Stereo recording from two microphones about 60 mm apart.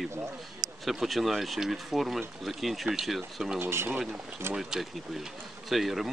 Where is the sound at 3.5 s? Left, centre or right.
Right.